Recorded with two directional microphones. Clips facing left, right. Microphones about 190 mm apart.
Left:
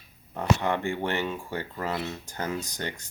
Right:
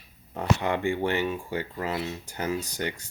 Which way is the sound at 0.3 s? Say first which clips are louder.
Even; 15° right (ahead or behind).